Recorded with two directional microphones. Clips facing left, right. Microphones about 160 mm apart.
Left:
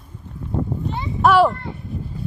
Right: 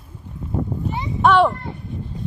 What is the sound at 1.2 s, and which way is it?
Speech, centre (ahead or behind).